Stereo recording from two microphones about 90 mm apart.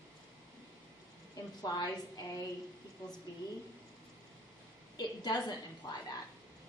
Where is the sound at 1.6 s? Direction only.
45° left (ahead or behind).